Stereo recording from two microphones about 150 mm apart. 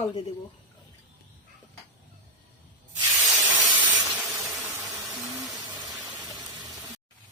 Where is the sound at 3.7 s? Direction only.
30° right (ahead or behind).